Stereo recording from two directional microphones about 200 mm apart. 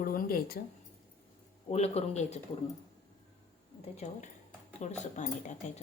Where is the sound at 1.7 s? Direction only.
30° left (ahead or behind).